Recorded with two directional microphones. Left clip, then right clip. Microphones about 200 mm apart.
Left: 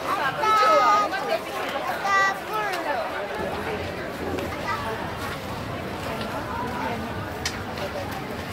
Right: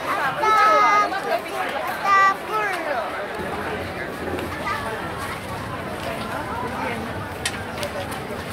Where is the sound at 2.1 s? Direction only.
15° right (ahead or behind).